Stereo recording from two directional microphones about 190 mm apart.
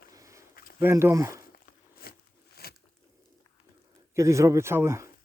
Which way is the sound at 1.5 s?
50° left (ahead or behind).